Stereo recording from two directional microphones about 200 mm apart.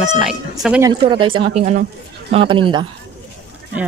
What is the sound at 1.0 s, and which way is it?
Speech, 25° right (ahead or behind).